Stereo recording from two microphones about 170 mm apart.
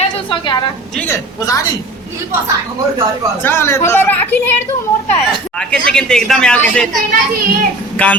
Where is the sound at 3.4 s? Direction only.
15° left (ahead or behind).